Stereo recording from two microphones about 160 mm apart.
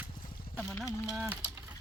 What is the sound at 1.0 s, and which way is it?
Speech, 5° right (ahead or behind).